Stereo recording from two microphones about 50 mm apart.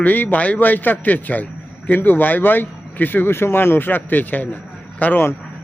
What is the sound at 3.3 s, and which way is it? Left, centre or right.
Speech, left.